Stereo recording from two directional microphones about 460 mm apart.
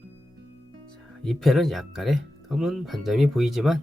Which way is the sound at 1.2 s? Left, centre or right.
Centre.